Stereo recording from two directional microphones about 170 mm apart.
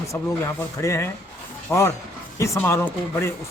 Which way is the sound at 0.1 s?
15° left (ahead or behind).